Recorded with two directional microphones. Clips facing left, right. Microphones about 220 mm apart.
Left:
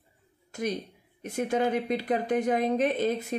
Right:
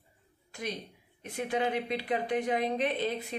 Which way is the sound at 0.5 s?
45° left (ahead or behind).